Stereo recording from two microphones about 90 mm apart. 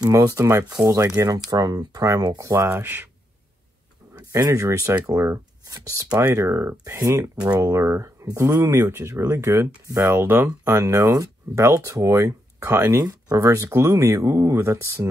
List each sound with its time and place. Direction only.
0.0 s speech: 45° right (ahead or behind)
2.5 s speech: 30° right (ahead or behind)
4.1 s speech: 45° right (ahead or behind)